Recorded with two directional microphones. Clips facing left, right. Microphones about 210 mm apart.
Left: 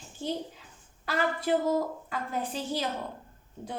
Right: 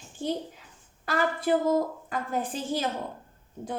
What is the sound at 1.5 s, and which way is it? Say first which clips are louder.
A woman's voice: right 3 dB; 50° right (ahead or behind).